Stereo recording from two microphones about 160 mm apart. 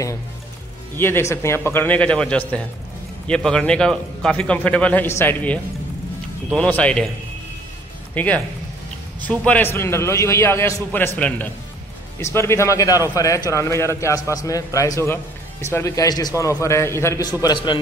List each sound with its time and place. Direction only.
0.9 s speech: 15° left (ahead or behind)
8.1 s a man's voice: 10° left (ahead or behind); by 17.7 s 25° left (ahead or behind)